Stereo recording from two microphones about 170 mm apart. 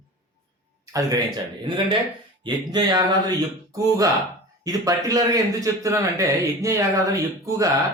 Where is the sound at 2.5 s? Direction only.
25° right (ahead or behind).